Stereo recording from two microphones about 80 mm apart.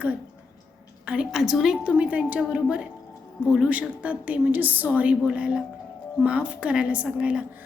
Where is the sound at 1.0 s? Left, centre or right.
Centre.